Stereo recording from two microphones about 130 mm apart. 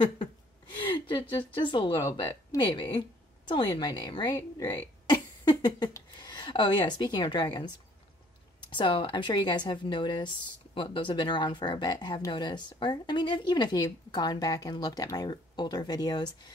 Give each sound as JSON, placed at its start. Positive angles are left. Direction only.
{"t": 0.7, "sound": "a sound", "side_deg": 35}
{"t": 1.5, "sound": "speech", "side_deg": 40}
{"t": 4.3, "sound": "speech", "side_deg": 20}
{"t": 5.1, "sound": "speech", "side_deg": 30}
{"t": 8.7, "sound": "speech", "side_deg": 40}